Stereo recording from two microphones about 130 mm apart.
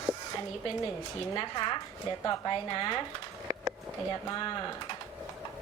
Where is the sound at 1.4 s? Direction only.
35° left (ahead or behind).